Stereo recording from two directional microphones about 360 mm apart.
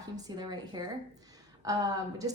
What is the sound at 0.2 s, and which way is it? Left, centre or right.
Speech, centre.